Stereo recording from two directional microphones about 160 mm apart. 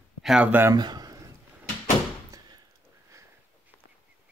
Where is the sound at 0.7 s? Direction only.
25° right (ahead or behind).